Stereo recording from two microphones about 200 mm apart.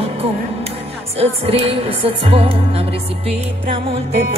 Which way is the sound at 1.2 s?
30° right (ahead or behind).